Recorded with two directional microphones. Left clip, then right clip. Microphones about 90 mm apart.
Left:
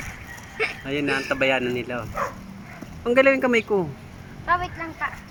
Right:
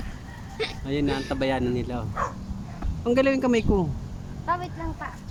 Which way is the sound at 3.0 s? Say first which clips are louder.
Left 4 dB; 5° left (ahead or behind).